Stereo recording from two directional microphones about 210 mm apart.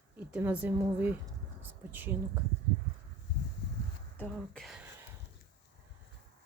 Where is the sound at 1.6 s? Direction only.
10° right (ahead or behind).